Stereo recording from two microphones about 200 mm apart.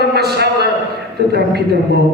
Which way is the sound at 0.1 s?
55° right (ahead or behind).